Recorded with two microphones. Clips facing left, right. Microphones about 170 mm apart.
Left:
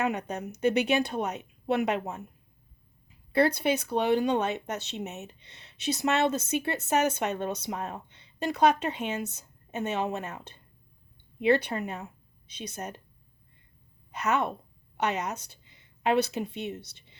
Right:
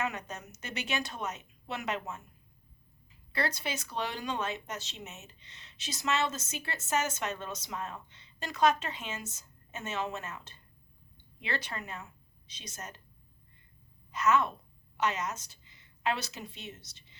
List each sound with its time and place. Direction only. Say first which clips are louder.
0.0 s speech: left 7 dB; 60° left (ahead or behind)
3.3 s speech: left 10 dB; 55° left (ahead or behind)
14.1 s a woman's voice: even; 60° left (ahead or behind)